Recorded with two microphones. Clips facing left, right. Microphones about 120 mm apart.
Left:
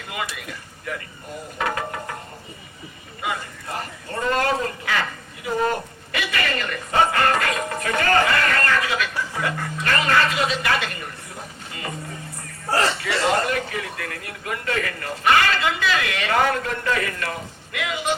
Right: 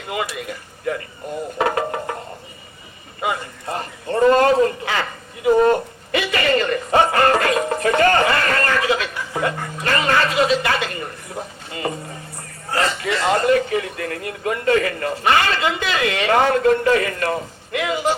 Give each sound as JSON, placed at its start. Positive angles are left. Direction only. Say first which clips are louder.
{"t": 0.1, "sound": "speech", "louder": "right 6 dB", "side_deg": -25}
{"t": 1.5, "sound": "speech", "louder": "right 5 dB", "side_deg": -30}
{"t": 3.2, "sound": "speech", "louder": "right 4 dB", "side_deg": -25}
{"t": 13.0, "sound": "a man's voice", "louder": "right 2 dB", "side_deg": -30}